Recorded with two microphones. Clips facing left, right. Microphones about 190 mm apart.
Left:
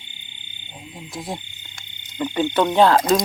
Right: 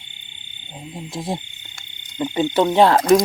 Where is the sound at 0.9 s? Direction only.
25° right (ahead or behind).